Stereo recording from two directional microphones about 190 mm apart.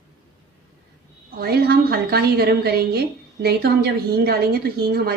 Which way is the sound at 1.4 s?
55° right (ahead or behind).